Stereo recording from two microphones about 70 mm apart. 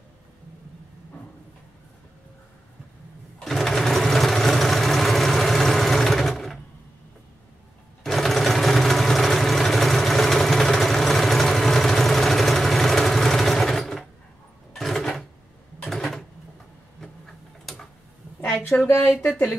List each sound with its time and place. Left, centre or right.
3.3 s sewing machine: centre
8.0 s sewing machine: centre
14.7 s a sound: centre
18.9 s speech: left